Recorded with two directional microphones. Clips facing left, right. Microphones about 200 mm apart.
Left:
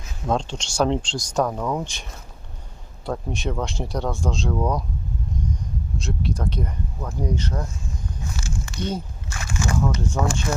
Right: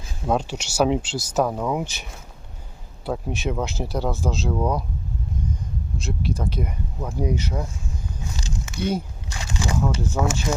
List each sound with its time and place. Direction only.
0.3 s speech: 10° right (ahead or behind)
3.1 s speech: 5° right (ahead or behind)
6.0 s speech: centre (ahead or behind); by 9.8 s 15° right (ahead or behind)
9.8 s speech: 5° right (ahead or behind)